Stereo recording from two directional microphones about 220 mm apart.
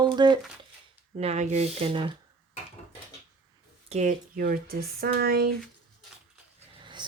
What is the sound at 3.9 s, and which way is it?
Speech, 35° right (ahead or behind).